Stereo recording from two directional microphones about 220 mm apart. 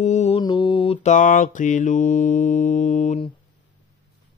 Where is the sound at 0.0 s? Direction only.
30° left (ahead or behind).